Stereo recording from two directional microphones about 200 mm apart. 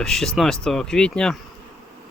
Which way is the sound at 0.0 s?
Centre (ahead or behind).